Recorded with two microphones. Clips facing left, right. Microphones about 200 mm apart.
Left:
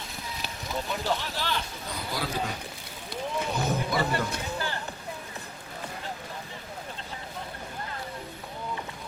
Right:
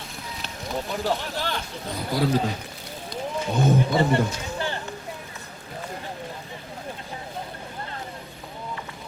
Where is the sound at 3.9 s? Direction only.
25° right (ahead or behind).